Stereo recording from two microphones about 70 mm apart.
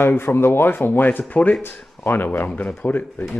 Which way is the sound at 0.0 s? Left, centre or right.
Left.